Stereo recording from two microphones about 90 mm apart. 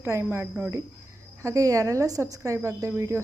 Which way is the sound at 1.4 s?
35° right (ahead or behind).